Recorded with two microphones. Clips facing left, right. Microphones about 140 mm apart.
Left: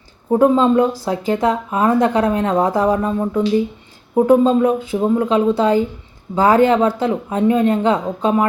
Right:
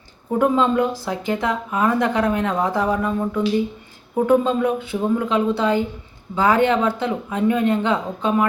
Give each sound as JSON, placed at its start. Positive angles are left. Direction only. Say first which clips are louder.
{"t": 0.3, "sound": "speech", "louder": "left 5 dB", "side_deg": 35}